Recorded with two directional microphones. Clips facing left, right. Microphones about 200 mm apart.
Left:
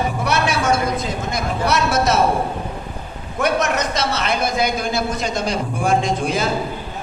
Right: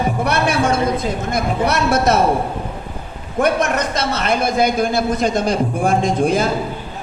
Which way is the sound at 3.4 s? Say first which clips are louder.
Right 2 dB; 55° right (ahead or behind).